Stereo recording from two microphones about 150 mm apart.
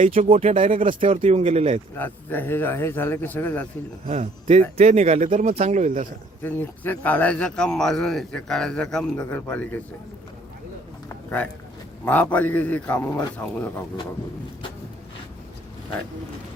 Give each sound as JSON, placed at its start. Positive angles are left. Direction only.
{"t": 0.0, "sound": "speech", "side_deg": -55}
{"t": 0.3, "sound": "speech", "side_deg": -40}
{"t": 1.0, "sound": "speech", "side_deg": -40}
{"t": 2.0, "sound": "a man's voice", "side_deg": 15}
{"t": 4.0, "sound": "speech", "side_deg": -50}
{"t": 6.4, "sound": "a man's voice", "side_deg": 10}
{"t": 12.0, "sound": "a man's voice", "side_deg": 10}